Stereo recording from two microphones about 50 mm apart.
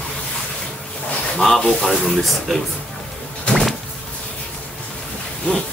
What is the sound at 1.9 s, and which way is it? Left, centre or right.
Speech, centre.